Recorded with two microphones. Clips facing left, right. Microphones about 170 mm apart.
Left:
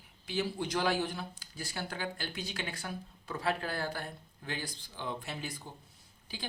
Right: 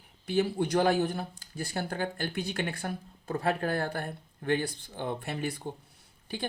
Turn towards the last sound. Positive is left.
turn(degrees=-60)  # may be behind; listen again after turning